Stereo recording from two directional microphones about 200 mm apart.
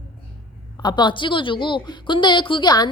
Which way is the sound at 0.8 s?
20° left (ahead or behind).